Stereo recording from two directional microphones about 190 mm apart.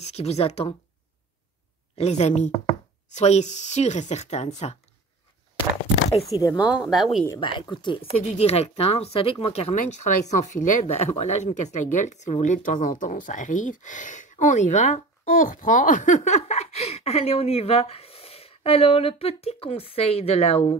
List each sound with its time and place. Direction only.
0.0 s speech: 35° left (ahead or behind)
2.0 s speech: 35° left (ahead or behind)
6.4 s speech: 20° left (ahead or behind)
6.7 s speech: centre (ahead or behind)
7.3 s speech: 25° left (ahead or behind)